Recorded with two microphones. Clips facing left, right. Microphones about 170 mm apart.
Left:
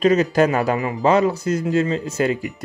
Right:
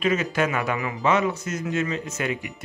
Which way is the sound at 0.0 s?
40° left (ahead or behind).